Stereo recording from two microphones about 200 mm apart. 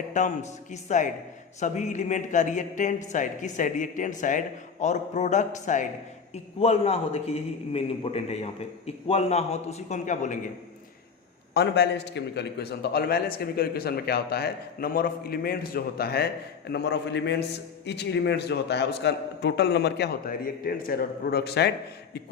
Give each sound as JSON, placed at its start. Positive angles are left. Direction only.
{"t": 0.1, "sound": "speech", "side_deg": 35}
{"t": 11.5, "sound": "a man's voice", "side_deg": 60}